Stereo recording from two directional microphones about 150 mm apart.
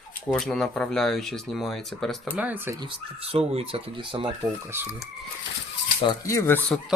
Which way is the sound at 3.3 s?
40° right (ahead or behind).